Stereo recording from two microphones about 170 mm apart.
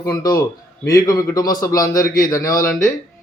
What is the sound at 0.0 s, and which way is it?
Speech, 25° left (ahead or behind).